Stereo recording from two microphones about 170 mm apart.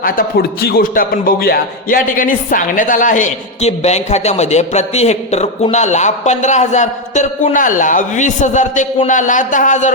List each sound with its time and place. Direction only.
0.0 s a man's voice: 60° left (ahead or behind)